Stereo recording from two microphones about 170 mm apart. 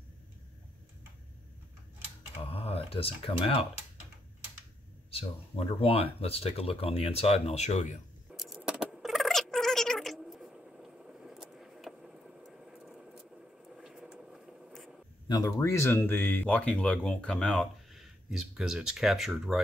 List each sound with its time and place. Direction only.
2.5 s speech: 35° left (ahead or behind)
5.1 s speech: 35° left (ahead or behind)
8.3 s a sound: centre (ahead or behind)
8.5 s rodents: 5° right (ahead or behind)
15.2 s speech: 20° left (ahead or behind); by 19.6 s centre (ahead or behind)